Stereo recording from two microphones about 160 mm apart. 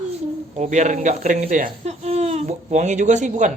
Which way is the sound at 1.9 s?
40° right (ahead or behind).